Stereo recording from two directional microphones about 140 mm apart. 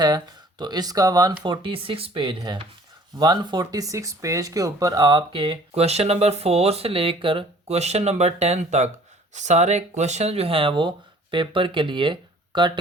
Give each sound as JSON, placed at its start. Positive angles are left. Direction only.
{"t": 0.6, "sound": "speech", "side_deg": -30}
{"t": 1.5, "sound": "speech", "side_deg": -40}